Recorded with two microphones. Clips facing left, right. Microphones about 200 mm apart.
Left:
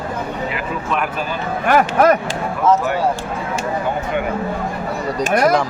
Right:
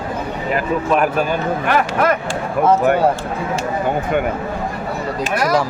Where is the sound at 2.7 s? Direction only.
55° right (ahead or behind).